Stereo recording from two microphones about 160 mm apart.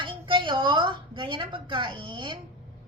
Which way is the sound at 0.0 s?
30° right (ahead or behind).